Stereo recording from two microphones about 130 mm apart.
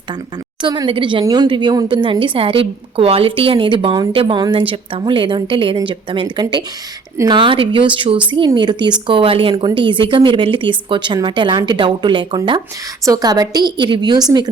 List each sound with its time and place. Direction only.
0.6 s speech: 35° right (ahead or behind)
1.2 s speech: 30° right (ahead or behind)